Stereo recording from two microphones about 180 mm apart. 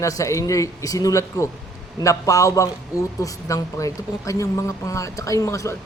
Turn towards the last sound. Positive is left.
turn(degrees=15)  # may be behind; listen again after turning